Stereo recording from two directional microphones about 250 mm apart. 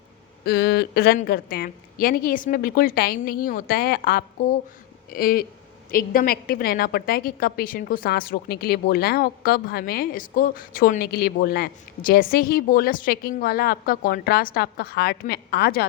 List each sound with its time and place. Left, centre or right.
0.4 s a woman's voice: left